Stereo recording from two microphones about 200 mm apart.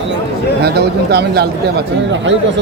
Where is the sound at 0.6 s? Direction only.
55° right (ahead or behind).